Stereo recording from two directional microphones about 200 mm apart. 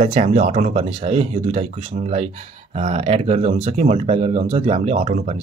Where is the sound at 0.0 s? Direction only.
30° right (ahead or behind).